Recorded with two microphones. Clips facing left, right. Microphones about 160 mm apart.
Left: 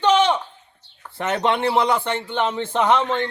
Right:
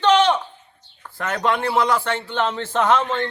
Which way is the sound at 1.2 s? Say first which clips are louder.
Left 1 dB; 25° left (ahead or behind).